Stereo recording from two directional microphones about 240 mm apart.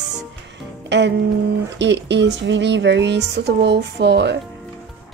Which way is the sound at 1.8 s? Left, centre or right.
Right.